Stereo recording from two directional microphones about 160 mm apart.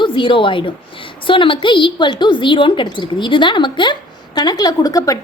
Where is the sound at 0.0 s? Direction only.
30° left (ahead or behind).